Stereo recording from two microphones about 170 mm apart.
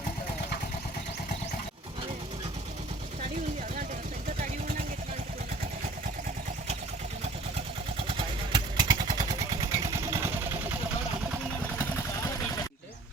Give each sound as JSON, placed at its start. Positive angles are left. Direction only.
{"t": 8.5, "sound": "vehicle", "side_deg": -25}